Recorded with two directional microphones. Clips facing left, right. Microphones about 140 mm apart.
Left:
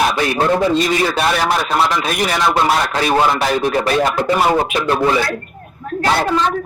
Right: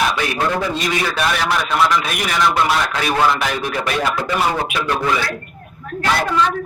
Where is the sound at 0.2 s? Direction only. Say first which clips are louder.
Left 5 dB; 30° left (ahead or behind).